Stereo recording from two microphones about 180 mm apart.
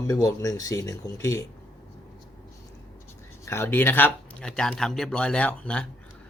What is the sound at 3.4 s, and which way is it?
A man's voice, 15° left (ahead or behind).